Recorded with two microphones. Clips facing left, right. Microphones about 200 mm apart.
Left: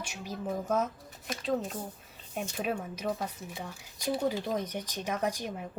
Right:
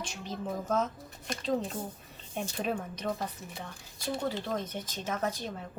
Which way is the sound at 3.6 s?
15° left (ahead or behind).